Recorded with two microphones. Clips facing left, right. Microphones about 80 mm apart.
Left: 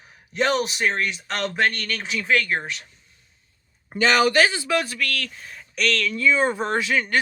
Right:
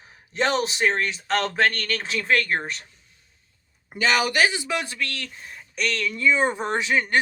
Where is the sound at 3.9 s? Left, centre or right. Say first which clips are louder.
Left 3 dB; centre.